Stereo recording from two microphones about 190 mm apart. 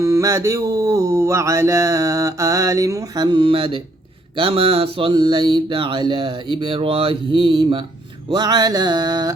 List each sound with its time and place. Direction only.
0.0 s speech: 15° right (ahead or behind)
4.4 s mantra: 30° right (ahead or behind)